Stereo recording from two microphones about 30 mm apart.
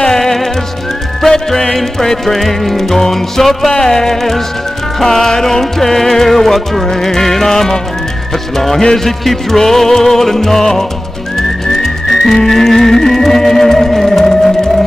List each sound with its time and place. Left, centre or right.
0.0 s music: centre